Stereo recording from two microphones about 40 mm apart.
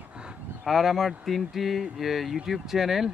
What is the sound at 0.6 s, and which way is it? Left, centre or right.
Speech, centre.